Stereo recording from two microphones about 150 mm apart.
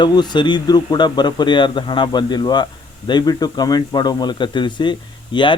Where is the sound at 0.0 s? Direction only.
30° left (ahead or behind).